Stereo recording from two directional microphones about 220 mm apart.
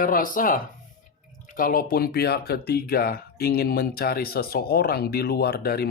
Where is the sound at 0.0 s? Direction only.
40° left (ahead or behind).